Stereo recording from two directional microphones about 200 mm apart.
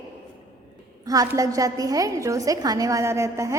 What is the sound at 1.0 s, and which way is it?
A woman's voice, 15° right (ahead or behind).